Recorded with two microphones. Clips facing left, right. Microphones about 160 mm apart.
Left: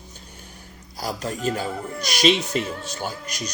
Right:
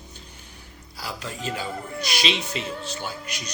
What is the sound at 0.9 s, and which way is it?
Speech, 45° left (ahead or behind).